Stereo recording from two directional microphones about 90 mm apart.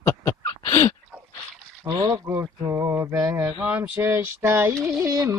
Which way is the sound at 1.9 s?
35° right (ahead or behind).